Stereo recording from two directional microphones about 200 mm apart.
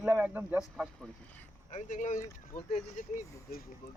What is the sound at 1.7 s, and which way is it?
Speech, 40° left (ahead or behind).